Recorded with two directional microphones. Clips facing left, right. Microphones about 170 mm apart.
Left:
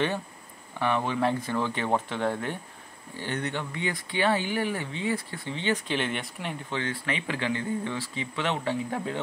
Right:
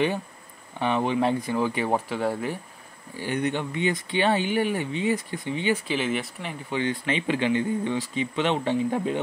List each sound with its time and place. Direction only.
0.7 s speech: 20° right (ahead or behind); by 6.5 s centre (ahead or behind)
6.7 s speech: 20° right (ahead or behind)